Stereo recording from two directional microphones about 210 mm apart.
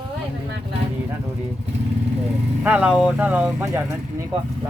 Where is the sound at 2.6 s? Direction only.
5° right (ahead or behind).